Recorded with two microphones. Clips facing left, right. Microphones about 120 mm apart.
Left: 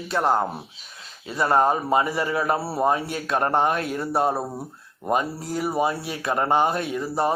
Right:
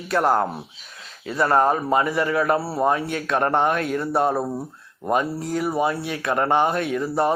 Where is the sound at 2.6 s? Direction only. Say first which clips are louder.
Right 1 dB; 10° left (ahead or behind).